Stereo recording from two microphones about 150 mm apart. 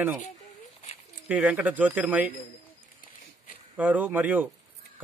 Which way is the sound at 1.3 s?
10° right (ahead or behind).